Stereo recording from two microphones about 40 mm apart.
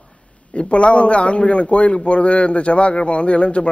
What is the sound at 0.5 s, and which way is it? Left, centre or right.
A man's voice, left.